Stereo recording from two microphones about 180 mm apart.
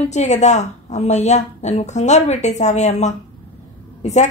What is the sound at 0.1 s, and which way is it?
A woman's voice, 40° left (ahead or behind).